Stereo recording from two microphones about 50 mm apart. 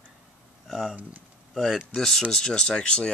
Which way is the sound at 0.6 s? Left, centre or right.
Centre.